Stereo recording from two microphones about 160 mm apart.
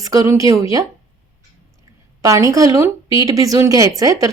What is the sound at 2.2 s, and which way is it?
Speech, 20° right (ahead or behind).